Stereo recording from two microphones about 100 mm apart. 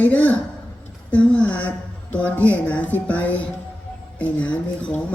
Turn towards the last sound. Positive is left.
turn(degrees=15)  # may be behind; listen again after turning